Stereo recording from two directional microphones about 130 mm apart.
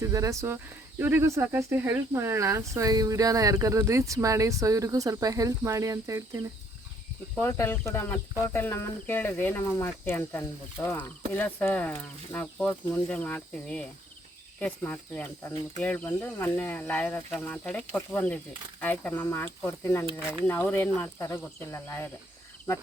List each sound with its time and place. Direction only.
0.0 s speech: 25° right (ahead or behind)
7.3 s speech: 15° left (ahead or behind)